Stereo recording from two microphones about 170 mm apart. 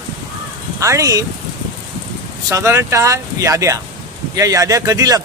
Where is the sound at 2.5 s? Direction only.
15° right (ahead or behind).